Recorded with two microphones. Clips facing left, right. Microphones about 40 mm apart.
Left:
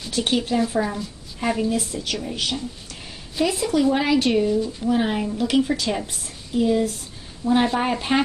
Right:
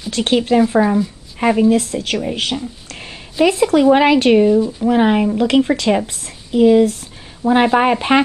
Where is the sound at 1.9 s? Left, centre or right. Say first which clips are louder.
Right 8 dB; right.